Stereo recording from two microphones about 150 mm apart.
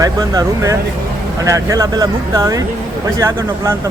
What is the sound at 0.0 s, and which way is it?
Speech, 25° right (ahead or behind).